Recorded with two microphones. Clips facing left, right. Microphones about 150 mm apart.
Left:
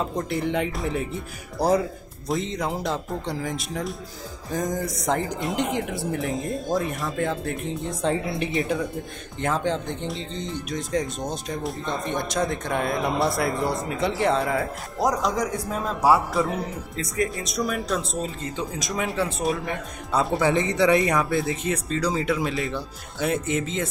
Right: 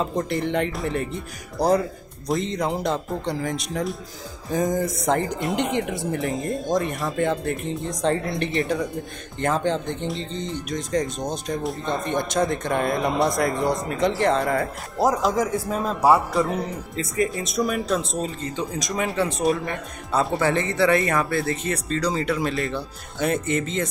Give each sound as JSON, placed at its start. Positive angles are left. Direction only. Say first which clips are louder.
{"t": 0.0, "sound": "speech", "louder": "right 2 dB", "side_deg": 5}
{"t": 20.4, "sound": "speech", "louder": "left 1 dB", "side_deg": 15}